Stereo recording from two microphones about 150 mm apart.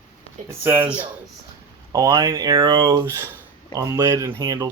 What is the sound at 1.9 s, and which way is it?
Speech, 20° right (ahead or behind).